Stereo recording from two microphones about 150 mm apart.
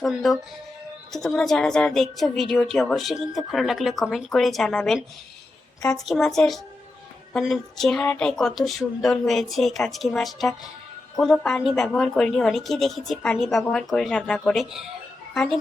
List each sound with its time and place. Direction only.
0.0 s a woman's voice: centre (ahead or behind)